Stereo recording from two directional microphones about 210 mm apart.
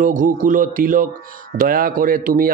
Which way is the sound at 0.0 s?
40° right (ahead or behind).